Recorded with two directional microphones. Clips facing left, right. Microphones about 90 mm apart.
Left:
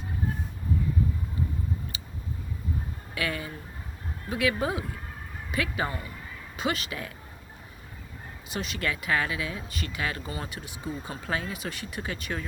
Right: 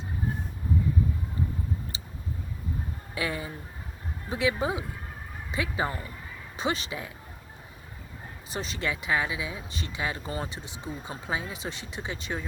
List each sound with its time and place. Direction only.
1.9 s a sound: 30° right (ahead or behind)
3.2 s speech: 25° right (ahead or behind)
8.4 s speech: 30° right (ahead or behind)